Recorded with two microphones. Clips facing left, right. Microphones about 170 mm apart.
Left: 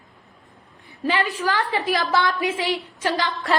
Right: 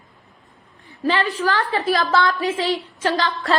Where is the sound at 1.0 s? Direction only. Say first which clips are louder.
Right 2 dB; 15° left (ahead or behind).